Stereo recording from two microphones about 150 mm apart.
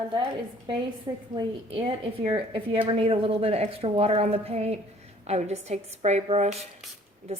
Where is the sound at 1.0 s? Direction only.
35° right (ahead or behind).